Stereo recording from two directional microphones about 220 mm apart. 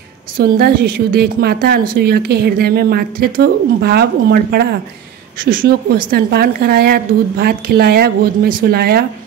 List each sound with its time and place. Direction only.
0.4 s a woman's voice: 45° right (ahead or behind)